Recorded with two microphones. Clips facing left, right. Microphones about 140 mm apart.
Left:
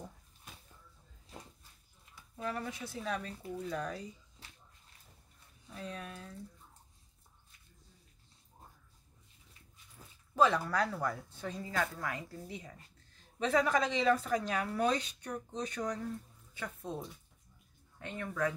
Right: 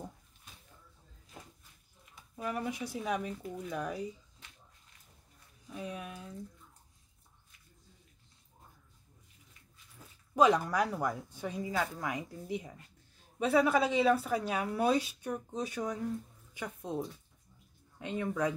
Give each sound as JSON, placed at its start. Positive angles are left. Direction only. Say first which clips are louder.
{"t": 2.1, "sound": "speech", "louder": "right 2 dB", "side_deg": -15}
{"t": 4.4, "sound": "dog", "louder": "left 2 dB", "side_deg": 35}
{"t": 5.7, "sound": "speech", "louder": "right 3 dB", "side_deg": -10}
{"t": 10.3, "sound": "speech", "louder": "right 3 dB", "side_deg": -15}
{"t": 17.9, "sound": "speech", "louder": "right 5 dB", "side_deg": -15}